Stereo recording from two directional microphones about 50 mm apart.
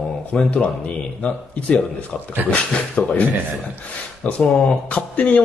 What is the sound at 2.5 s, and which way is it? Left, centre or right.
Speech, left.